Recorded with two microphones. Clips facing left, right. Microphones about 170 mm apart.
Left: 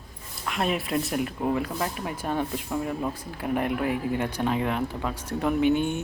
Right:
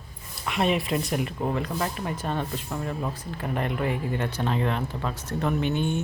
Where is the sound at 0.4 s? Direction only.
Centre (ahead or behind).